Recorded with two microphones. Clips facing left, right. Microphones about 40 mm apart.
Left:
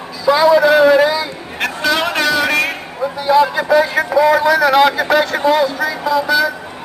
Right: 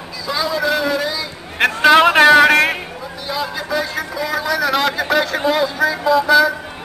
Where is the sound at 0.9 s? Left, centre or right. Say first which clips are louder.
Left 8 dB; left.